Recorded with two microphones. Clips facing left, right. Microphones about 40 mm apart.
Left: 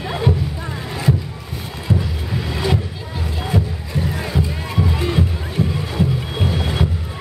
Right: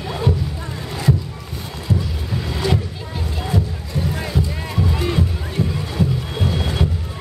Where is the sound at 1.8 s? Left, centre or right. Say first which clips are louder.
Left 2 dB; centre.